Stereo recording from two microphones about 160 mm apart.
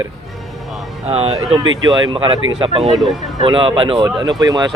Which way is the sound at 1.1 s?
40° right (ahead or behind).